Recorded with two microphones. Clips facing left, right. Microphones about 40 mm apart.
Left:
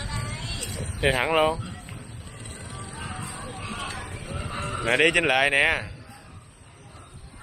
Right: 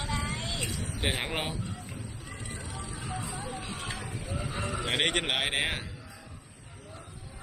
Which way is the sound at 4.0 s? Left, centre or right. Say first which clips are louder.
Left 2 dB; left.